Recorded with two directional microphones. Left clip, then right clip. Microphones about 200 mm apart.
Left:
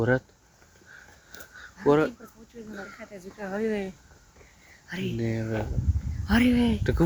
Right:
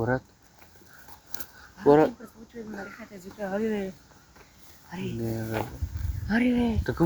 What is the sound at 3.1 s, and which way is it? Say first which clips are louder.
Speech: right 4 dB; 10° left (ahead or behind).